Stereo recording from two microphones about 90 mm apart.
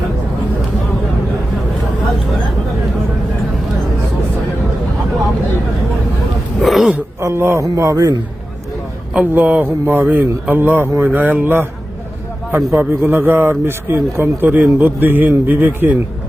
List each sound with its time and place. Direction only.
6.6 s throat clearing: centre (ahead or behind)
7.2 s a sound: 30° right (ahead or behind)
7.6 s speech: 35° right (ahead or behind)
9.2 s a man's voice: 20° right (ahead or behind)